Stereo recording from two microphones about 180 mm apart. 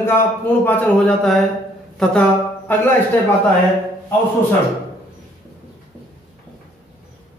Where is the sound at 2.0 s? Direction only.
5° left (ahead or behind).